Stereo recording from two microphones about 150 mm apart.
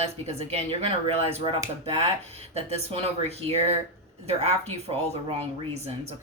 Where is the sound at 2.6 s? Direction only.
40° right (ahead or behind).